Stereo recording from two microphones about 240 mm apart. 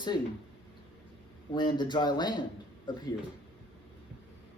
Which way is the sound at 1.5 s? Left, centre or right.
Centre.